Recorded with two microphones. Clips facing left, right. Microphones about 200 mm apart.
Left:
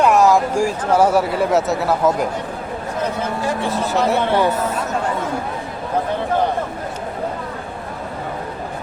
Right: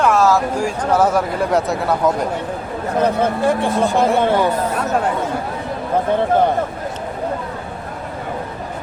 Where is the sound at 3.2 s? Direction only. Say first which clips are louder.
Right 5 dB; 55° right (ahead or behind).